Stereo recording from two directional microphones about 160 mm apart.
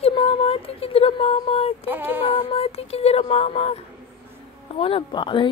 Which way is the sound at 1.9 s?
15° right (ahead or behind).